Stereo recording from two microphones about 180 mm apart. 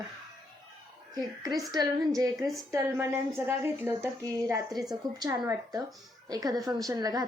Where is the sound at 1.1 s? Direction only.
20° right (ahead or behind).